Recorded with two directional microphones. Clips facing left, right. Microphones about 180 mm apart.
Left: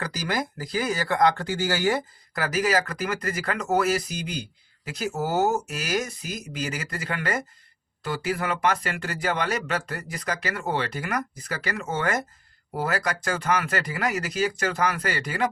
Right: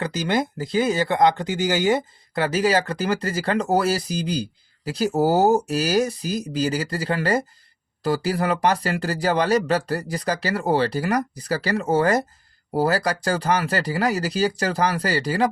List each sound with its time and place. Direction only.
0.0 s speech: 25° right (ahead or behind)